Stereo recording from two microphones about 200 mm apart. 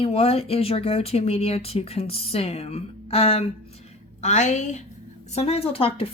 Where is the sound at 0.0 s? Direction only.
30° left (ahead or behind).